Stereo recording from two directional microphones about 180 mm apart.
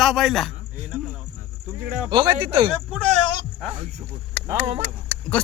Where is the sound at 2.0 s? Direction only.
30° right (ahead or behind).